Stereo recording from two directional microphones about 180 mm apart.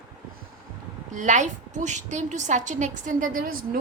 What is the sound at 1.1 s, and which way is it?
A woman's voice, 45° right (ahead or behind).